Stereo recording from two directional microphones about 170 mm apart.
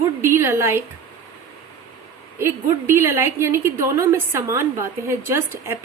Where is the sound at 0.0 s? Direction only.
15° right (ahead or behind).